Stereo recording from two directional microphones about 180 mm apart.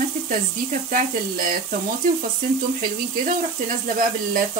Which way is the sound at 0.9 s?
50° right (ahead or behind).